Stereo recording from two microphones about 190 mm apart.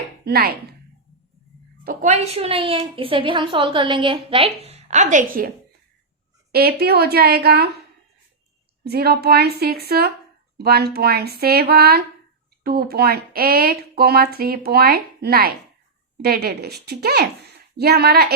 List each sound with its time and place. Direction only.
0.3 s speech: 55° right (ahead or behind)
1.8 s a woman's voice: 45° right (ahead or behind)
6.5 s speech: 55° right (ahead or behind)
8.8 s speech: 55° right (ahead or behind)